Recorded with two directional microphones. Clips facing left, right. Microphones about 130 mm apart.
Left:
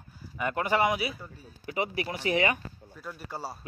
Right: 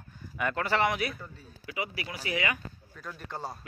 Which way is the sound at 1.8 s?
30° left (ahead or behind).